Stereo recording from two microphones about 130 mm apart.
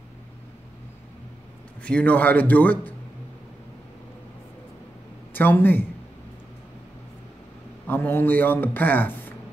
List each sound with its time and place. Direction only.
1.8 s a man's voice: 10° left (ahead or behind)
5.3 s a man's voice: 15° left (ahead or behind)
7.8 s a man's voice: 15° left (ahead or behind)